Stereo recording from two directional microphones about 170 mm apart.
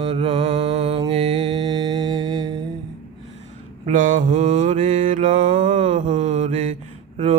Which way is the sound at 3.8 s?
50° right (ahead or behind).